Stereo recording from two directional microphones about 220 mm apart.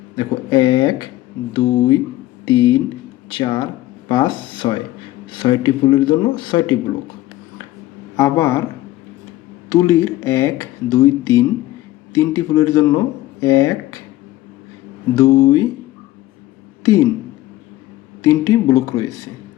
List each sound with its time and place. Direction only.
0.2 s speech: 20° left (ahead or behind)
8.1 s speech: 15° left (ahead or behind)
9.6 s speech: 15° left (ahead or behind)
15.1 s speech: 15° left (ahead or behind)
16.8 s a woman's voice: 15° left (ahead or behind)
18.2 s speech: 15° left (ahead or behind)